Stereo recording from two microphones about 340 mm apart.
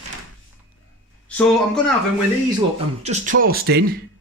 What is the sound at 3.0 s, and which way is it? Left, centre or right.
Speech, right.